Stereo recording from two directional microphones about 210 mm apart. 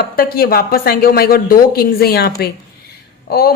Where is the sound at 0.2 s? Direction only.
45° left (ahead or behind).